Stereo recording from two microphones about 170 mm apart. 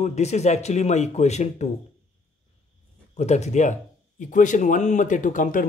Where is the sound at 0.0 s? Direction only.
40° left (ahead or behind).